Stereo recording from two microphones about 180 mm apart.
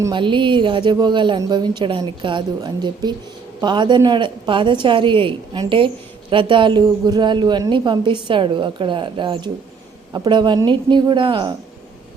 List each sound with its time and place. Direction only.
0.0 s a woman's voice: 25° right (ahead or behind)